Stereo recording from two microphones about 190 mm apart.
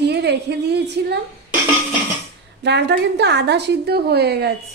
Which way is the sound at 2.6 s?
65° right (ahead or behind).